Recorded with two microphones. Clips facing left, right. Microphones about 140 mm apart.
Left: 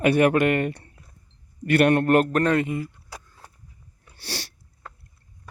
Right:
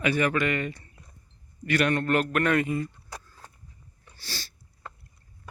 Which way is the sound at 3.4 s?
10° left (ahead or behind).